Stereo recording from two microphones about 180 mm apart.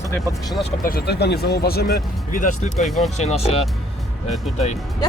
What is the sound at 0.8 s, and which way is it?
Speech, 60° left (ahead or behind).